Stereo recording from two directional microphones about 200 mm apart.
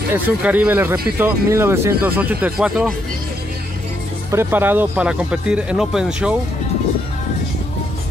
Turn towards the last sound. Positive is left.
turn(degrees=0)  # may be behind; listen again after turning